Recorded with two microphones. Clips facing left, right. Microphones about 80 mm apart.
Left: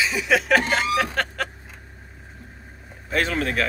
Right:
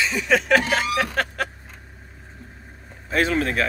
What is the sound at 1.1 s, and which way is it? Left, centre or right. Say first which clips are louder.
Vehicle: right 1 dB; centre.